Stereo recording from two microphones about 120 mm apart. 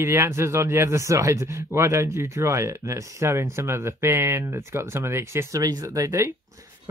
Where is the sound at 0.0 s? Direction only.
20° right (ahead or behind).